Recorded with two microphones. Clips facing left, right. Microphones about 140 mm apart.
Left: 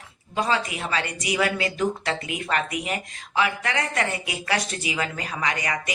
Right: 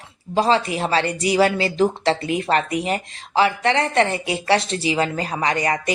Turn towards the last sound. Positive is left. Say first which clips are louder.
# right 6 dB
turn(degrees=-35)  # may be behind; listen again after turning